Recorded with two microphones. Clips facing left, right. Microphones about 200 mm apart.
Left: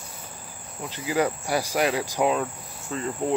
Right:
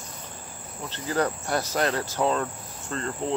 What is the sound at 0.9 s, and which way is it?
Cricket, 10° left (ahead or behind).